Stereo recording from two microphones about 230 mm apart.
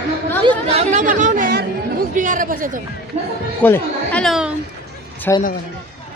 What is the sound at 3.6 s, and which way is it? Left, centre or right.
Speech, centre.